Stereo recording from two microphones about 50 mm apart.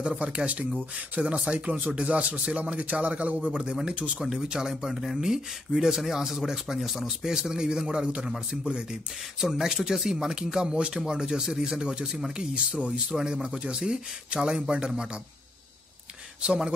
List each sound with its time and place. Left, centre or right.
0.0 s speech: right
4.2 s speech: centre
4.9 s speech: centre; by 8.8 s right
9.4 s speech: centre